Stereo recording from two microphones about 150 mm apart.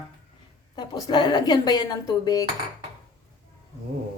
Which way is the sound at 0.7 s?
30° left (ahead or behind).